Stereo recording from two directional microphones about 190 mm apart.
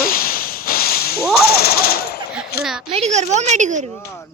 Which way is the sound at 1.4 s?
55° left (ahead or behind).